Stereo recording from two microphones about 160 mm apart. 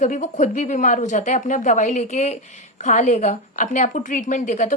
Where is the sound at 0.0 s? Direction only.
50° left (ahead or behind).